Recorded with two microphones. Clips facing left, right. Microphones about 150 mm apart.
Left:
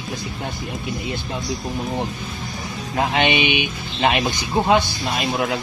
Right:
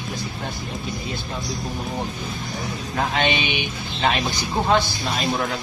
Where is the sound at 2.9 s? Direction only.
20° left (ahead or behind).